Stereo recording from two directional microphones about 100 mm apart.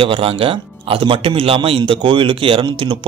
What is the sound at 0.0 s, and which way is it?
A man's voice, 65° right (ahead or behind).